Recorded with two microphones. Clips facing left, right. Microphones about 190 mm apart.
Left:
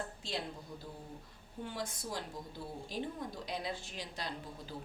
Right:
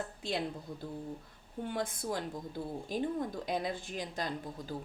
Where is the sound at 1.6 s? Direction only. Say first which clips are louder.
Right 6 dB; 55° right (ahead or behind).